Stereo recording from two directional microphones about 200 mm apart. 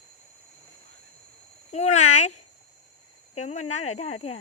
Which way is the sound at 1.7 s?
35° left (ahead or behind).